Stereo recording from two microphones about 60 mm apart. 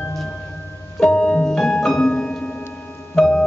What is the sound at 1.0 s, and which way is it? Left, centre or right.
Music, centre.